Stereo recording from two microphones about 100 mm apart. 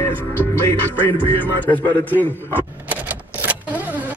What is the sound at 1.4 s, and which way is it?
A man's voice, 15° left (ahead or behind).